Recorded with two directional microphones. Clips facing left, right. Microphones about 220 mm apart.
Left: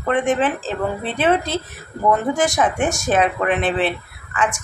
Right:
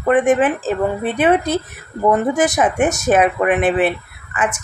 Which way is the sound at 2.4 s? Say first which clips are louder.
Right 3 dB; 20° right (ahead or behind).